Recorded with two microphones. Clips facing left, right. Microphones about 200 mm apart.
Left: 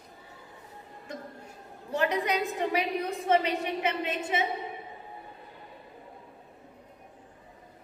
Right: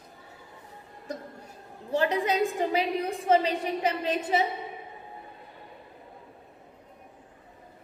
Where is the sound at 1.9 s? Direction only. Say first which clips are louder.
Right 2 dB; 30° right (ahead or behind).